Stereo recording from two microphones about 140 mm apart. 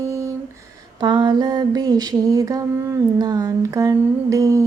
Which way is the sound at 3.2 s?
25° right (ahead or behind).